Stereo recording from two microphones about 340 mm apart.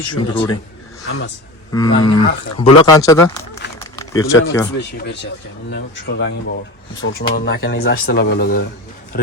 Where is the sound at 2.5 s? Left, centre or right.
Centre.